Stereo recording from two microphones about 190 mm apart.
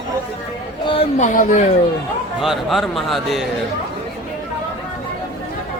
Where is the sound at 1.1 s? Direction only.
40° left (ahead or behind).